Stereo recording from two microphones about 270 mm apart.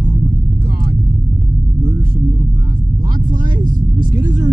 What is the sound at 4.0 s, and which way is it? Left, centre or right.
Vehicle, right.